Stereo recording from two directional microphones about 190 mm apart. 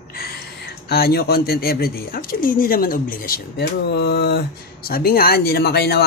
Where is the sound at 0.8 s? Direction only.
55° left (ahead or behind).